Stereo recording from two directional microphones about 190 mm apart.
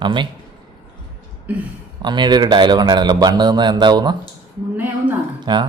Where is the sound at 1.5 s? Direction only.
10° right (ahead or behind).